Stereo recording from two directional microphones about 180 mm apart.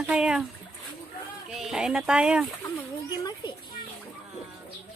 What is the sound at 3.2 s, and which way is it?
Children playing, 20° left (ahead or behind).